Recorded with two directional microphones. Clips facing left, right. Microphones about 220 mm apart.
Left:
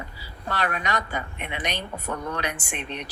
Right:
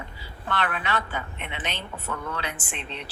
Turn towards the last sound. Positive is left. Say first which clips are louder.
# left 3 dB
turn(degrees=15)  # may be behind; listen again after turning